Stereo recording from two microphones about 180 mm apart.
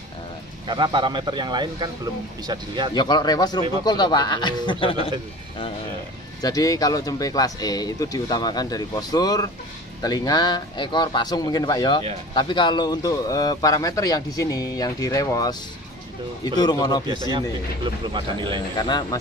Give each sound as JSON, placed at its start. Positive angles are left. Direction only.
{"t": 0.7, "sound": "a man's voice", "side_deg": -25}
{"t": 2.9, "sound": "a man's voice", "side_deg": 25}
{"t": 6.4, "sound": "a man's voice", "side_deg": 20}
{"t": 16.5, "sound": "a man's voice", "side_deg": 20}
{"t": 17.3, "sound": "a man's voice", "side_deg": -25}
{"t": 18.8, "sound": "a man's voice", "side_deg": 25}